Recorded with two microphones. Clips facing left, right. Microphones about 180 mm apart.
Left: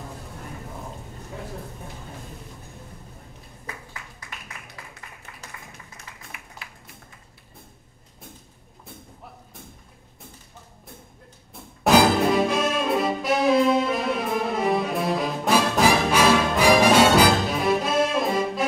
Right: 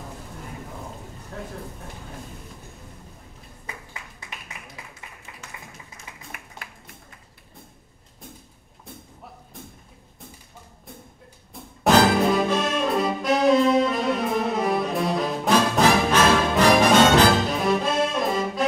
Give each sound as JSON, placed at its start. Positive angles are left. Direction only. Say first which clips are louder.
{"t": 6.6, "sound": "music", "louder": "right 1 dB", "side_deg": -50}
{"t": 11.5, "sound": "music", "louder": "even", "side_deg": 0}